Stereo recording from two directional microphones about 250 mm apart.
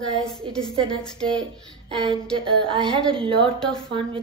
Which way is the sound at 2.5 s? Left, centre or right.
Centre.